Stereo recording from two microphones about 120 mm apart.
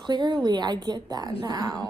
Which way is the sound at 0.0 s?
40° right (ahead or behind).